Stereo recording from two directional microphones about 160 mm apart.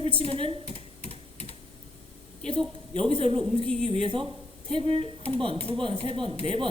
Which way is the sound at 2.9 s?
35° right (ahead or behind).